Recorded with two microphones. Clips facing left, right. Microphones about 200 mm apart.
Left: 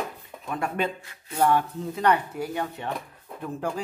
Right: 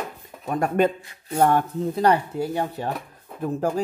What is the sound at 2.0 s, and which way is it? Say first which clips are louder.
Speech: right 3 dB; 30° right (ahead or behind).